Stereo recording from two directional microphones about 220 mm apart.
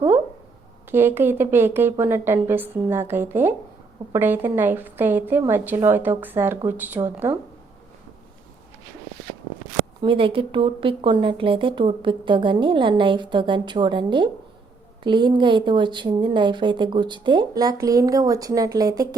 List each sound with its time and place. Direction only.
0.9 s a woman's voice: 10° right (ahead or behind)
10.0 s speech: 25° right (ahead or behind)